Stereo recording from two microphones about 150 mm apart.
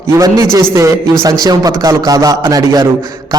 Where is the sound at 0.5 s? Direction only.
20° right (ahead or behind).